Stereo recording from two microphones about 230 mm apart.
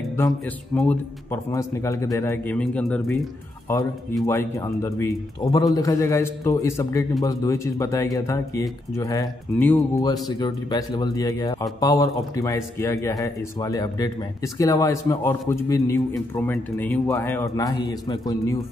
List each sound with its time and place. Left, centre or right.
0.7 s speech: centre
4.3 s speech: centre